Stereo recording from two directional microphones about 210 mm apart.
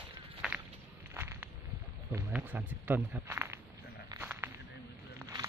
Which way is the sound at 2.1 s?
10° right (ahead or behind).